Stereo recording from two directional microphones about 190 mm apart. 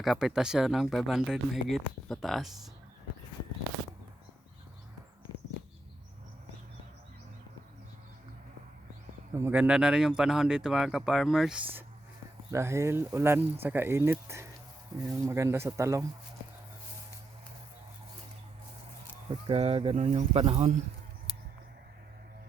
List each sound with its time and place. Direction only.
0.0 s speech: centre (ahead or behind)
9.3 s speech: 10° right (ahead or behind)
19.3 s speech: 30° right (ahead or behind)